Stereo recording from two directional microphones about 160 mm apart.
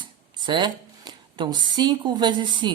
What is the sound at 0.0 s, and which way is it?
Speech, 30° right (ahead or behind).